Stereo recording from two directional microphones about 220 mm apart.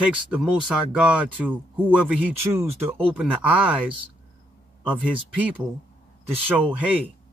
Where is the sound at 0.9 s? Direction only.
5° right (ahead or behind).